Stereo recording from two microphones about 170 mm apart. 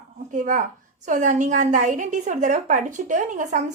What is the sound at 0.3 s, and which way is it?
A woman's voice, 50° right (ahead or behind).